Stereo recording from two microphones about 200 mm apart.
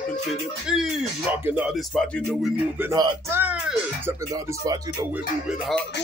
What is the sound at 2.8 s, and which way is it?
Speech, 15° right (ahead or behind).